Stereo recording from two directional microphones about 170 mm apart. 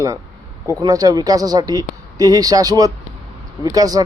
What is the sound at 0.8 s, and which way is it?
Speech, 20° right (ahead or behind).